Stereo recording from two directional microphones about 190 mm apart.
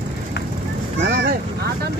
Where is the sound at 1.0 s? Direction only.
65° right (ahead or behind).